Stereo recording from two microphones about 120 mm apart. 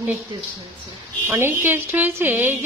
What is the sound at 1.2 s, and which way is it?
A woman's voice, 20° right (ahead or behind).